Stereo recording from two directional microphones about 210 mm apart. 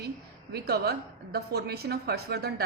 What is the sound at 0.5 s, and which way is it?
A woman's voice, 50° right (ahead or behind).